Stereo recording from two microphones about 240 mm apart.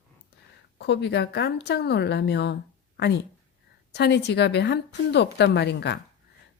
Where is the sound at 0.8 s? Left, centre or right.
Left.